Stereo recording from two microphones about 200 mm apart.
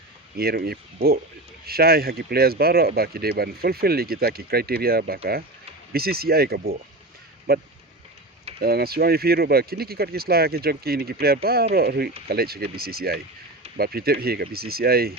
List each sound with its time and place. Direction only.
0.3 s speech: 50° right (ahead or behind)